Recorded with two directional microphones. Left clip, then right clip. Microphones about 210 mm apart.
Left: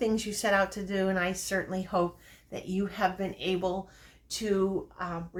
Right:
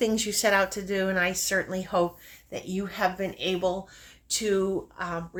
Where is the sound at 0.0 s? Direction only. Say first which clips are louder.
Right 4 dB; 45° right (ahead or behind).